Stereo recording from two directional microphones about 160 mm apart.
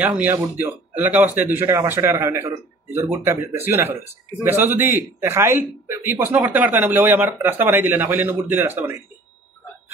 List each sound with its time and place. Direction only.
0.0 s speech: 10° right (ahead or behind)